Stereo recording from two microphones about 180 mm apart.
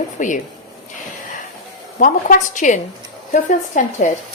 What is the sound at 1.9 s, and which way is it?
A woman's voice, 45° left (ahead or behind).